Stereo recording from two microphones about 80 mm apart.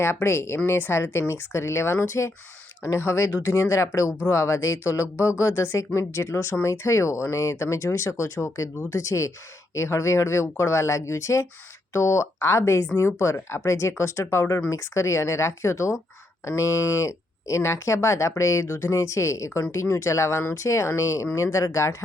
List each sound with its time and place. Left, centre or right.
0.0 s speech: left